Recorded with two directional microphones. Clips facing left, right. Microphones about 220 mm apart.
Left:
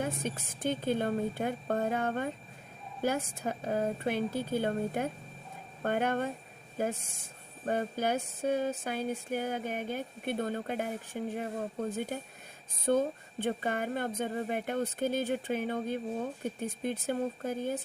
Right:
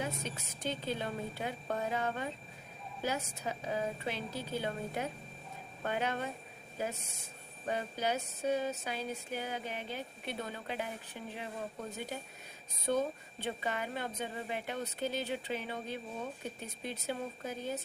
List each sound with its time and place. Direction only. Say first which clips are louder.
0.0 s music: left 5 dB; 50° left (ahead or behind)